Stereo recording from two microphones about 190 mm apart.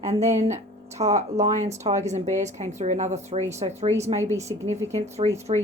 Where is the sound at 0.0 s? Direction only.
35° right (ahead or behind).